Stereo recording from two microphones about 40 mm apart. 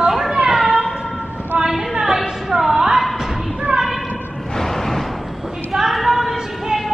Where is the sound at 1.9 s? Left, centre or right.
Centre.